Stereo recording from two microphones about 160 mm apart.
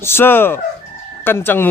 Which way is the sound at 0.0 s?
15° left (ahead or behind).